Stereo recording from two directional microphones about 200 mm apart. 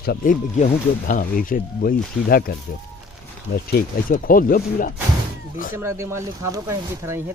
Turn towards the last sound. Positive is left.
turn(degrees=-10)  # may be behind; listen again after turning